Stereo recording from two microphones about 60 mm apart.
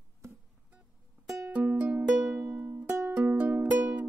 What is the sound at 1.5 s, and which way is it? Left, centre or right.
Music, right.